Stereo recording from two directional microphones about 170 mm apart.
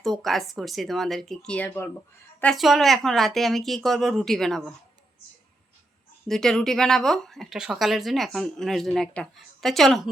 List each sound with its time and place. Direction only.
0.0 s speech: centre (ahead or behind)
2.4 s speech: centre (ahead or behind)
6.2 s speech: 5° left (ahead or behind)